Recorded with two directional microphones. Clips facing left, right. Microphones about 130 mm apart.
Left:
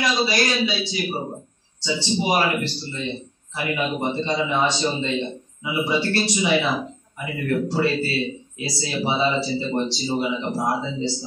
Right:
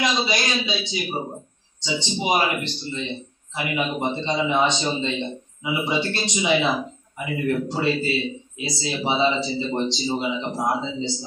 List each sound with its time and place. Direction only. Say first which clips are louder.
0.0 s speech: left 2 dB; 20° right (ahead or behind)